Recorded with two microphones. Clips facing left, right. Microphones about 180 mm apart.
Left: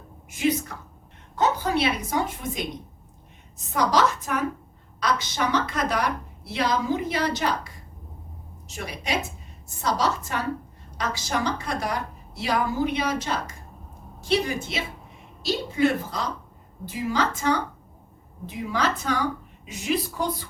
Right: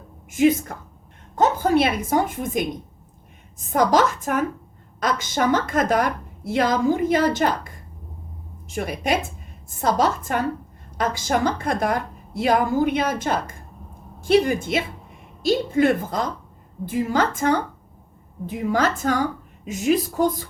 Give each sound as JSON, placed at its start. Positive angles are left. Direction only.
{"t": 0.3, "sound": "a woman's voice", "side_deg": -50}
{"t": 3.7, "sound": "a woman's voice", "side_deg": -50}